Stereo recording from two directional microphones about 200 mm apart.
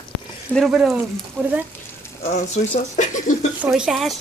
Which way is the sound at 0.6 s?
Centre (ahead or behind).